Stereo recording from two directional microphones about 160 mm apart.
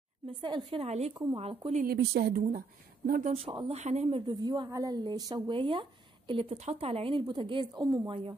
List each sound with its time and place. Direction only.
0.3 s speech: 30° right (ahead or behind)
1.8 s a woman's voice: 75° right (ahead or behind)
3.3 s speech: 35° right (ahead or behind)
4.3 s speech: 25° right (ahead or behind)